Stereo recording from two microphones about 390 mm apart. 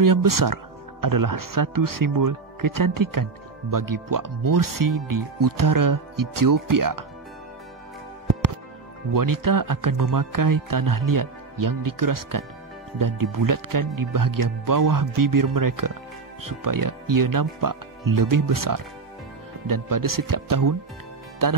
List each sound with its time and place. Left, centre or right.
0.0 s speech: right
9.1 s speech: right